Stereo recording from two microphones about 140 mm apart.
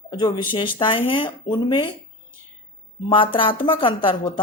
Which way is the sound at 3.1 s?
35° left (ahead or behind).